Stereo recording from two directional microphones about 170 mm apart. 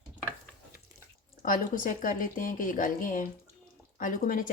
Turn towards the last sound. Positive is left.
turn(degrees=50)  # may be behind; listen again after turning